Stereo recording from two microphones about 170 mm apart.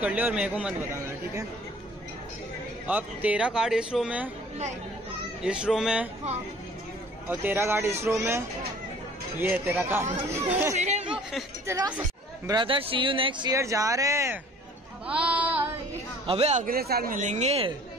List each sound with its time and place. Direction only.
0.0 s a man's voice: 10° right (ahead or behind)
2.9 s speech: 10° right (ahead or behind)
5.4 s speech: 5° right (ahead or behind)
7.2 s a man's voice: 15° right (ahead or behind)
10.8 s speech: 40° right (ahead or behind)
11.6 s speech: 20° right (ahead or behind)
15.0 s a sound: 5° right (ahead or behind)
16.3 s speech: 40° right (ahead or behind)
16.6 s speech: 65° right (ahead or behind); by 17.7 s 35° right (ahead or behind)